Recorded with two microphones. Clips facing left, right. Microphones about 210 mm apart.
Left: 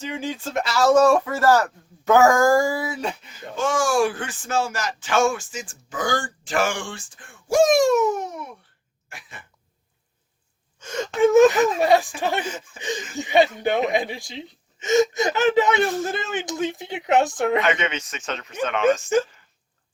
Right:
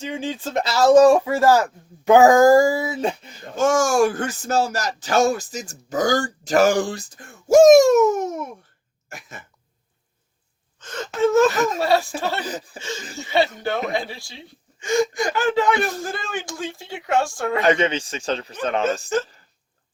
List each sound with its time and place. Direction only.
0.1 s a man's voice: 20° right (ahead or behind)
0.6 s speech: 40° right (ahead or behind)
0.9 s a man's voice: 15° right (ahead or behind)
3.0 s speech: 40° right (ahead or behind)
9.0 s cough: 45° right (ahead or behind)
10.8 s gasp: 10° left (ahead or behind)
11.8 s speech: 15° left (ahead or behind)
12.4 s speech: 35° right (ahead or behind)
13.1 s speech: 15° left (ahead or behind)
17.6 s speech: 35° right (ahead or behind)